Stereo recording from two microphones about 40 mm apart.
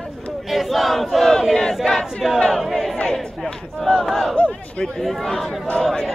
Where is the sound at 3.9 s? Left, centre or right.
Centre.